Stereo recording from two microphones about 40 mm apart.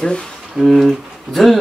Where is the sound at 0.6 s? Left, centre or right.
Centre.